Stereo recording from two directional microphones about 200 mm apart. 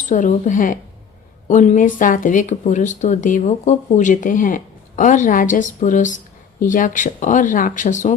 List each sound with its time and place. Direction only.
0.1 s speech: 40° left (ahead or behind)